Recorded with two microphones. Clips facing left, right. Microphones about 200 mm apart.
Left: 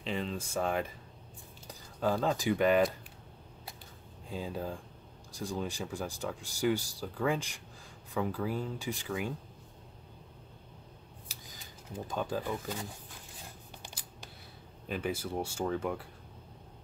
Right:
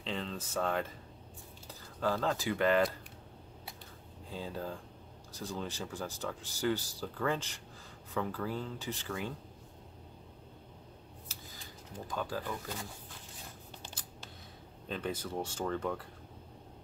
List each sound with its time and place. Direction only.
0.0 s speech: 15° left (ahead or behind)
4.3 s speech: 15° left (ahead or behind)
11.3 s a sound: 15° left (ahead or behind)
12.1 s speech: 20° left (ahead or behind)
13.8 s scissors: 15° left (ahead or behind)
14.9 s speech: 10° left (ahead or behind)